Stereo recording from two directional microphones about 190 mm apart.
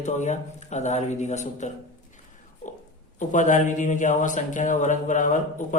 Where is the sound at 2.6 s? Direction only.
40° left (ahead or behind).